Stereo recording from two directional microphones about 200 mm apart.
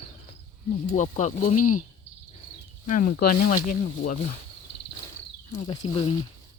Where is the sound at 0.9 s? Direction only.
40° left (ahead or behind).